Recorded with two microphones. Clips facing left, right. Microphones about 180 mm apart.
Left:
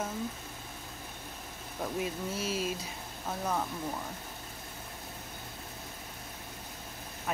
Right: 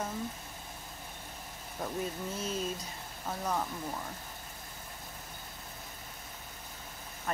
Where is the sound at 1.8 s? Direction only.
5° left (ahead or behind).